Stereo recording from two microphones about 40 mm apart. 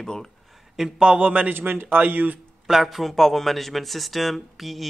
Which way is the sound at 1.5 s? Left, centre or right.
Right.